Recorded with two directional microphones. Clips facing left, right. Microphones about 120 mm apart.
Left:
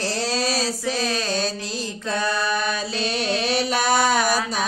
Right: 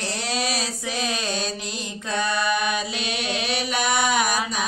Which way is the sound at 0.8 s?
20° right (ahead or behind).